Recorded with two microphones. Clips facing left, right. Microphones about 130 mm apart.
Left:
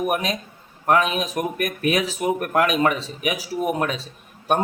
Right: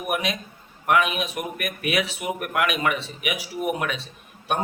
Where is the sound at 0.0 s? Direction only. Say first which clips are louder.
Left 3 dB; 40° left (ahead or behind).